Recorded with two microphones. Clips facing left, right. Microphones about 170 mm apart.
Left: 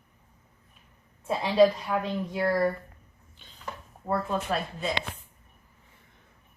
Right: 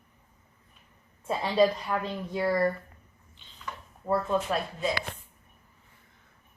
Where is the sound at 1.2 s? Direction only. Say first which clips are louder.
Left 3 dB; 5° left (ahead or behind).